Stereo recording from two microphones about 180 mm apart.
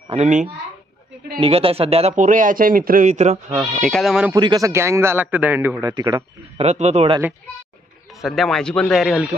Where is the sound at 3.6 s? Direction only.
Centre (ahead or behind).